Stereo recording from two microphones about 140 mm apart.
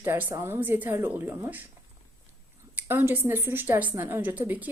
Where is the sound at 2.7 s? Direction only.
15° right (ahead or behind).